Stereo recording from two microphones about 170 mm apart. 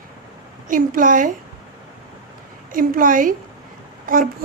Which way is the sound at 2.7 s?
55° right (ahead or behind).